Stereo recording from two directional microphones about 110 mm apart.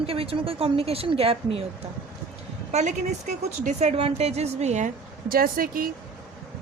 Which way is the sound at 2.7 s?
90° right.